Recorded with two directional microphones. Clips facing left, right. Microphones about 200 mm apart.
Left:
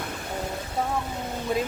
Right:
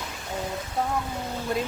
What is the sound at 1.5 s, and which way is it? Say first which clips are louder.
Speech: left 2 dB; centre (ahead or behind).